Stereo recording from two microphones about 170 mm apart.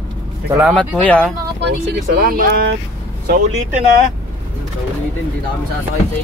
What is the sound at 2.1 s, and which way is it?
Speech, 60° right (ahead or behind).